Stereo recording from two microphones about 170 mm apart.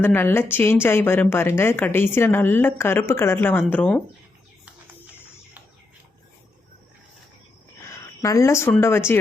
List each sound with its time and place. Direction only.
0.0 s speech: 10° left (ahead or behind)
7.9 s a sound: 20° left (ahead or behind)
8.7 s speech: 15° left (ahead or behind)